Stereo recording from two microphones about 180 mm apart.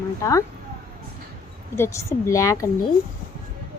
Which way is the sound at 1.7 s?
15° left (ahead or behind).